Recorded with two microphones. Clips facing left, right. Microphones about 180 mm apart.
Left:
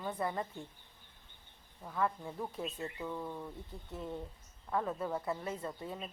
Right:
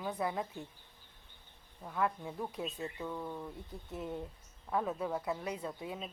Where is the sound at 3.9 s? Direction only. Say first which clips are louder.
Right 1 dB; 15° right (ahead or behind).